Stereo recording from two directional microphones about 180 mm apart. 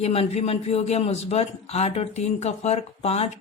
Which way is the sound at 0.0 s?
35° left (ahead or behind).